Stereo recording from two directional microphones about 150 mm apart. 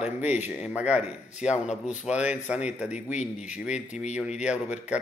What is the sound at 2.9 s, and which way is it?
Speech, 50° left (ahead or behind).